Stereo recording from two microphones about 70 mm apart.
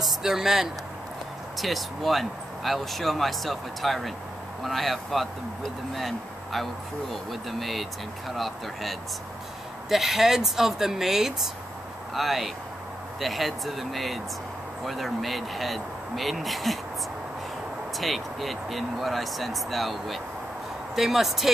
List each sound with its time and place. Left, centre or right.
0.0 s speech: centre
17.9 s speech: centre